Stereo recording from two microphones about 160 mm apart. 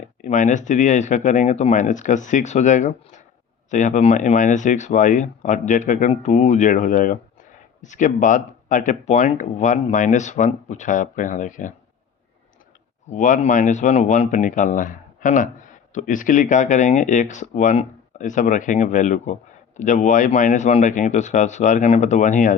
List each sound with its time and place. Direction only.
0.2 s speech: 50° left (ahead or behind)
13.1 s speech: 50° left (ahead or behind)